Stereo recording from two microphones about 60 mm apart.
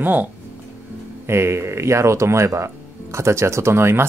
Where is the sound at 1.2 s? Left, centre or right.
Right.